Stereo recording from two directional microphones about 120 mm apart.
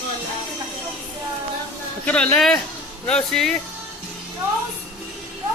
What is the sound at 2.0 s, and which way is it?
Speech, 10° left (ahead or behind).